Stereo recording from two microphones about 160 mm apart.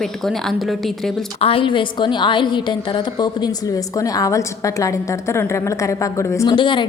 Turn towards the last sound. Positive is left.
turn(degrees=30)  # may be behind; listen again after turning